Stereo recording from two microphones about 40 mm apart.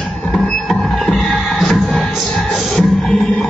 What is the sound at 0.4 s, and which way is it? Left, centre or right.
Music, centre.